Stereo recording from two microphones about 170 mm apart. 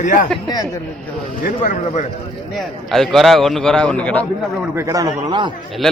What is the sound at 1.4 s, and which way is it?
Speech, 50° left (ahead or behind).